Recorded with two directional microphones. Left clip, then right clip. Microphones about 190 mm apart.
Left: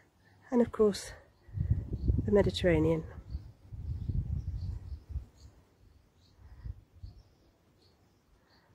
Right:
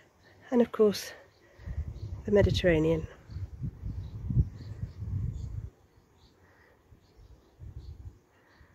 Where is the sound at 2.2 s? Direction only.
5° right (ahead or behind).